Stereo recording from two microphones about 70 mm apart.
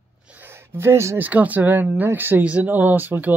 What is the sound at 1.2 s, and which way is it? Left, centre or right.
Speech, right.